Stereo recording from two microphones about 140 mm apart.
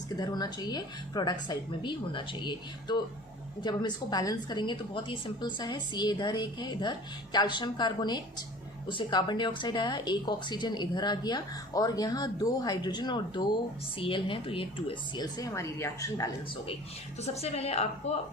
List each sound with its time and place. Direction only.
0.2 s speech: 30° left (ahead or behind)
17.2 s a woman's voice: 50° left (ahead or behind)